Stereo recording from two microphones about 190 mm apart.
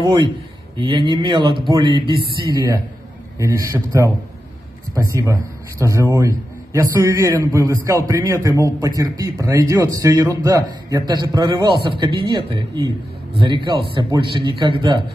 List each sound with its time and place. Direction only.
0.7 s a man's voice: 25° right (ahead or behind)